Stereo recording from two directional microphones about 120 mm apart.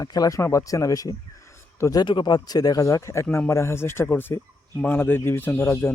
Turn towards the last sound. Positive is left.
turn(degrees=20)  # may be behind; listen again after turning